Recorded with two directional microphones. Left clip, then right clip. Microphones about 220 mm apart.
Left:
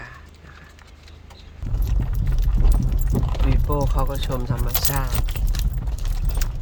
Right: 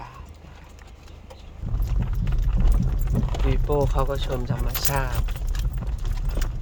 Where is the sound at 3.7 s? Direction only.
Centre (ahead or behind).